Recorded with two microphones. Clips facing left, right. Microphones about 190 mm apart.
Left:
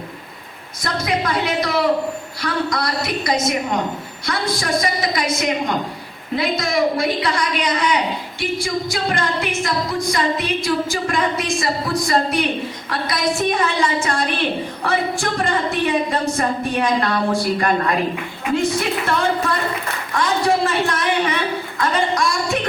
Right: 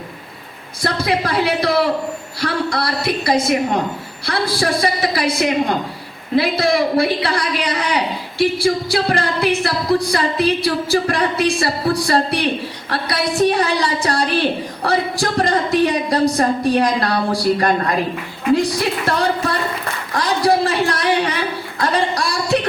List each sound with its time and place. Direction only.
0.8 s music: 30° right (ahead or behind)
18.5 s a woman's voice: 35° right (ahead or behind)
20.1 s a sound: 35° right (ahead or behind)